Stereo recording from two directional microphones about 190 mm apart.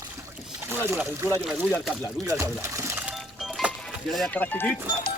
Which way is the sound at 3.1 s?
Centre (ahead or behind).